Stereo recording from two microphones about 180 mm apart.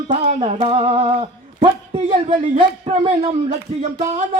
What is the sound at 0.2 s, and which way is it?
Speech, 35° right (ahead or behind).